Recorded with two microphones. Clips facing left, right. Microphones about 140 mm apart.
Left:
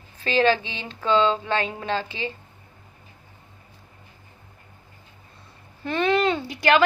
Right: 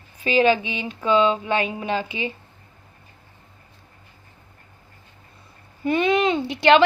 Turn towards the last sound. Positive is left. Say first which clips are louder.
# right 4 dB
turn(degrees=-25)  # may be behind; listen again after turning